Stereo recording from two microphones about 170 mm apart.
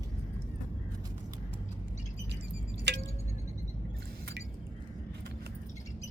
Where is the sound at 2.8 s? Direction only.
90° right.